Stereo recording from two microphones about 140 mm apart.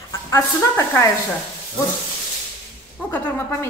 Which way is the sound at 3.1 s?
10° left (ahead or behind).